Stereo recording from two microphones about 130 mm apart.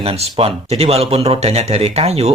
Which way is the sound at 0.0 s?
45° right (ahead or behind).